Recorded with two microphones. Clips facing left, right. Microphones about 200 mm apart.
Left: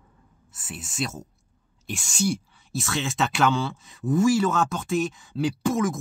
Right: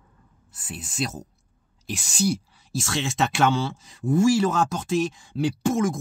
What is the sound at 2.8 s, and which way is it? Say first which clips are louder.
Speech: right 1 dB; 30° right (ahead or behind).